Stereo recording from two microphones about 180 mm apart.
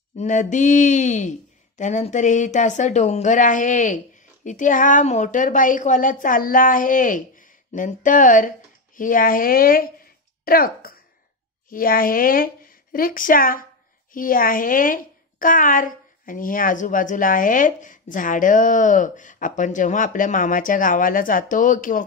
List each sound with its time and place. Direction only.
0.2 s a woman's voice: 45° left (ahead or behind)